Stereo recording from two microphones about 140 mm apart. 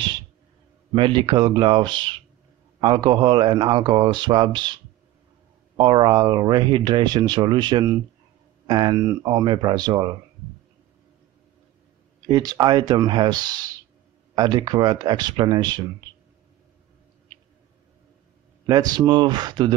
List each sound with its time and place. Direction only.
0.9 s speech: 35° right (ahead or behind)
5.8 s speech: 30° right (ahead or behind)
12.3 s speech: 30° right (ahead or behind)
18.7 s speech: 30° right (ahead or behind)